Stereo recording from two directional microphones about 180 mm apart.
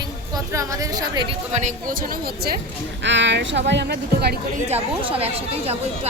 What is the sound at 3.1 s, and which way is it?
Speech, 80° right.